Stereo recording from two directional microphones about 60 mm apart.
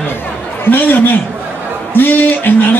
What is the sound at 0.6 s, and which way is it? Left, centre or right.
A man's voice, left.